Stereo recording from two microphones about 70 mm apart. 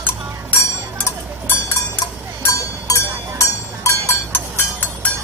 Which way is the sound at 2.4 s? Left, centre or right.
Left.